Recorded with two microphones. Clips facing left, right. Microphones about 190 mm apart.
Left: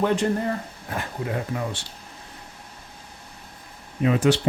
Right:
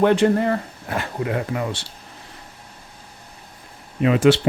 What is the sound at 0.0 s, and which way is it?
Speech, 75° right (ahead or behind).